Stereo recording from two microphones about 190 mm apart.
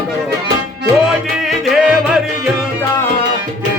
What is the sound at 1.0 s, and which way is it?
Music, centre (ahead or behind).